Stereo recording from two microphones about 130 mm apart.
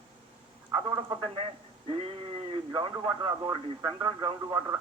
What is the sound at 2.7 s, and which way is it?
Speech, 35° right (ahead or behind).